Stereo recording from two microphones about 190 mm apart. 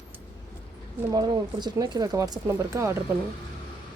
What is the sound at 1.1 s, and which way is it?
Speech, 20° right (ahead or behind).